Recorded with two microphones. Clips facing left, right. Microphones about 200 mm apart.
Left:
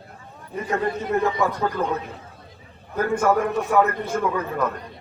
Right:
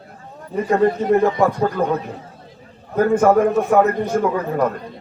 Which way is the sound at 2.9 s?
45° right (ahead or behind).